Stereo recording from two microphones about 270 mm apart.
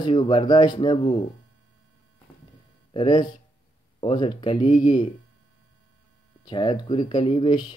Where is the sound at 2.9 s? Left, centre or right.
Centre.